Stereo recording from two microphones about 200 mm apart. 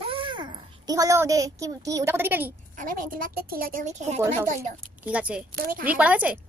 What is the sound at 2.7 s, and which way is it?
A woman's voice, 40° right (ahead or behind).